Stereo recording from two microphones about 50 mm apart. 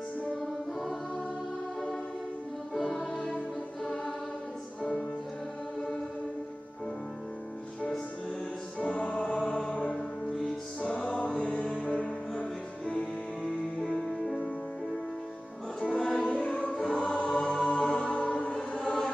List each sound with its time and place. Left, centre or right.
2.7 s music: centre
3.8 s choir: centre
8.7 s music: left
9.2 s chant: centre
9.9 s music: centre
14.2 s music: centre
15.8 s music: centre
16.3 s choir: left
16.7 s choir: centre
17.1 s choir: centre
17.5 s music: centre